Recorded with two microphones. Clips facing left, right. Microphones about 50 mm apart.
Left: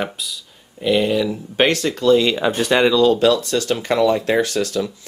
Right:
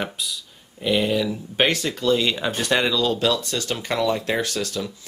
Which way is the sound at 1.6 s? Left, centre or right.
Centre.